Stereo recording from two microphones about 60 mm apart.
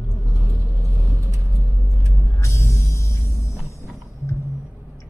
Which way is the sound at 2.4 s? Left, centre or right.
Left.